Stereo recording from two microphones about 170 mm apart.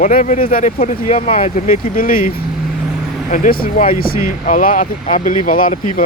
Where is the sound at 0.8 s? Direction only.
45° left (ahead or behind).